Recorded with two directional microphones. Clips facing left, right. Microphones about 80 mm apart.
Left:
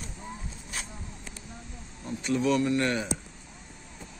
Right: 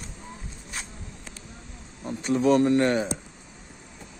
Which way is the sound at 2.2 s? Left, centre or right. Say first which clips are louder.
Right 5 dB; right.